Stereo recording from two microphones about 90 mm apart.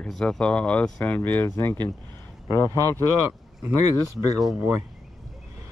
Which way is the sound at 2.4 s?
35° left (ahead or behind).